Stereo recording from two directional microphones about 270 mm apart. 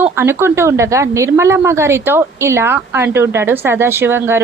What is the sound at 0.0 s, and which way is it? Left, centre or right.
A woman's voice, centre.